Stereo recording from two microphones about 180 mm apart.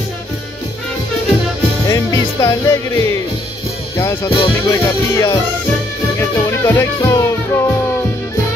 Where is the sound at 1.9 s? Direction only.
20° left (ahead or behind).